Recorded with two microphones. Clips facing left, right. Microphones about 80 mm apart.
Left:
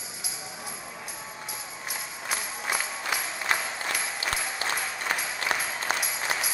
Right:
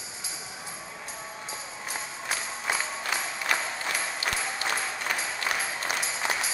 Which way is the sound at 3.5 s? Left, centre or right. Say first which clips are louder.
Left 1 dB; left.